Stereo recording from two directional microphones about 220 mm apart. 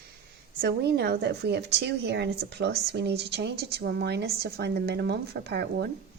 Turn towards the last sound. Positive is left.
turn(degrees=-50)  # may be behind; listen again after turning